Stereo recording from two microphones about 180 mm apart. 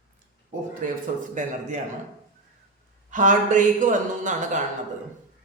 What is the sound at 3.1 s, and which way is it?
A man's voice, 45° right (ahead or behind).